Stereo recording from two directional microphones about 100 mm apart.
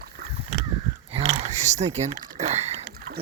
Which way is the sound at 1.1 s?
90° right.